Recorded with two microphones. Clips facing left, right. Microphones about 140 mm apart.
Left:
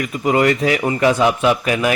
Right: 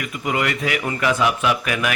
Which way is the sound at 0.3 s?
35° left (ahead or behind).